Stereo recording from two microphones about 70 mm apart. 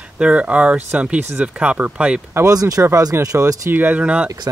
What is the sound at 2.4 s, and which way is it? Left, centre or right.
Speech, right.